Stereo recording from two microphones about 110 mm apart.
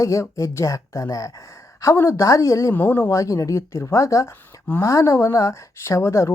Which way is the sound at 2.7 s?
20° left (ahead or behind).